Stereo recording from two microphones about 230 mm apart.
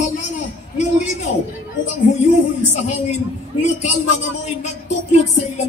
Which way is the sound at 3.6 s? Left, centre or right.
Left.